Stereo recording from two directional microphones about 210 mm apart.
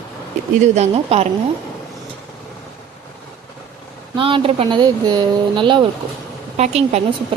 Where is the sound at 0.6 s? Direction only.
30° right (ahead or behind).